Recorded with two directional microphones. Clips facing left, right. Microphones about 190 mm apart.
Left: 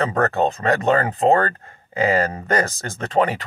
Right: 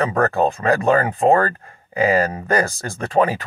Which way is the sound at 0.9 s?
25° left (ahead or behind).